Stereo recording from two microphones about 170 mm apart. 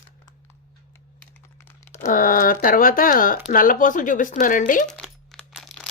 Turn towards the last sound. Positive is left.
turn(degrees=0)  # may be behind; listen again after turning